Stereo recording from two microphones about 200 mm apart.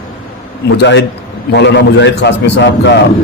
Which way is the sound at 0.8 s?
60° left (ahead or behind).